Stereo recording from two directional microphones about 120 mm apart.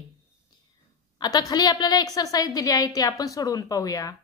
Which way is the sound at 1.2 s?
35° left (ahead or behind).